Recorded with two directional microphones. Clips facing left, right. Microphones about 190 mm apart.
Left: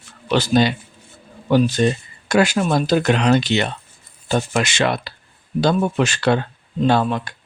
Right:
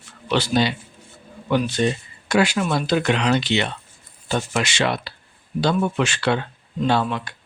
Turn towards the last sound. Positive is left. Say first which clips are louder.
# left 3 dB
turn(degrees=45)  # may be behind; listen again after turning